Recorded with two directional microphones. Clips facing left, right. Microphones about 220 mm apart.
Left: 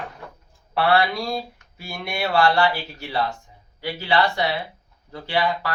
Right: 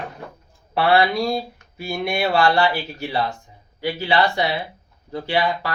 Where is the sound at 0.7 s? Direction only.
15° right (ahead or behind).